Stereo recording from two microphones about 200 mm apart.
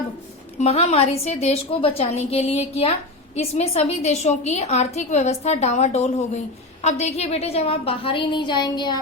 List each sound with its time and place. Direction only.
0.6 s a woman's voice: 30° left (ahead or behind)